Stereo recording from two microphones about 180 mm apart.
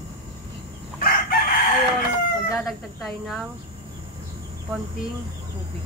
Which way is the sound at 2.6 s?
Centre (ahead or behind).